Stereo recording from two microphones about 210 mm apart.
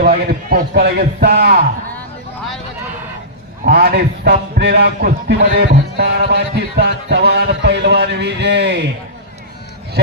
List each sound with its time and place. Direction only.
0.0 s a man's voice: 45° right (ahead or behind)
3.7 s a man's voice: 45° right (ahead or behind)